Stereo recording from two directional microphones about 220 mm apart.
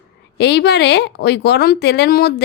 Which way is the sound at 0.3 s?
50° left (ahead or behind).